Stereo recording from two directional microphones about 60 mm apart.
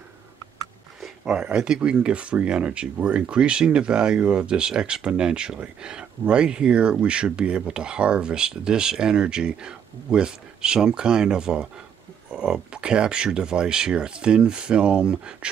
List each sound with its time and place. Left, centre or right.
1.0 s speech: centre
12.3 s a sound: centre
12.7 s speech: centre